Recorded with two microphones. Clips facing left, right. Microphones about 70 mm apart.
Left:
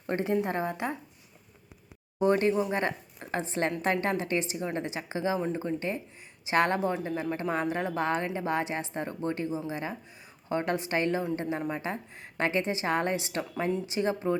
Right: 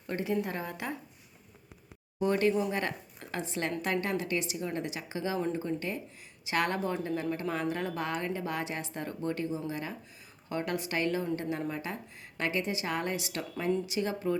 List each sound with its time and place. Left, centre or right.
0.1 s a woman's voice: left
2.1 s a woman's voice: left